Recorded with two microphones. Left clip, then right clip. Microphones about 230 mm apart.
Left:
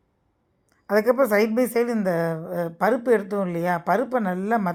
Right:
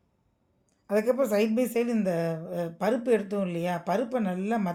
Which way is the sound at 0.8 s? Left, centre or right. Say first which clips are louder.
Left 6 dB; left.